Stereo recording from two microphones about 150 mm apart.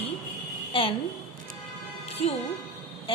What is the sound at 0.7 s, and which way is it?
Speech, 35° left (ahead or behind).